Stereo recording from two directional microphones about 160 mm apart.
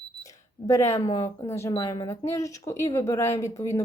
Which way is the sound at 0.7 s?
20° left (ahead or behind).